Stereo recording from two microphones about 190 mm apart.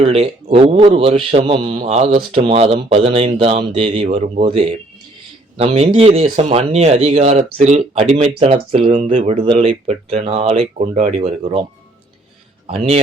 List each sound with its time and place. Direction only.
0.0 s a man's voice: 30° right (ahead or behind)
12.6 s a man's voice: 30° right (ahead or behind)